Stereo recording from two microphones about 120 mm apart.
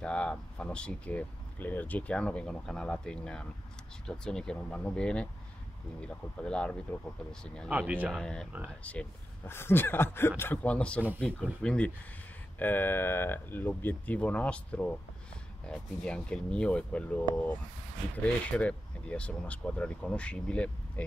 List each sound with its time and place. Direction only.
0.0 s speech: 5° left (ahead or behind)
7.7 s speech: 15° right (ahead or behind)
8.1 s speech: 5° left (ahead or behind)
18.2 s speech: 10° left (ahead or behind)